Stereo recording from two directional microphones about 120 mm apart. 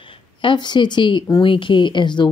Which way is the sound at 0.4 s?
40° left (ahead or behind).